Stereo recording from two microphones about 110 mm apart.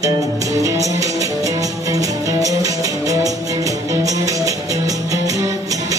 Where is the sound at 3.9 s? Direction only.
30° right (ahead or behind).